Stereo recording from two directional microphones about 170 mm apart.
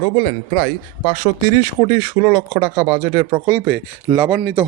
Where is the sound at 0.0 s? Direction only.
10° left (ahead or behind).